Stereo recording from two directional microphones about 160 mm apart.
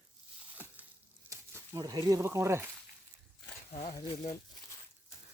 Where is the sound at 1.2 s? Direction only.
20° right (ahead or behind).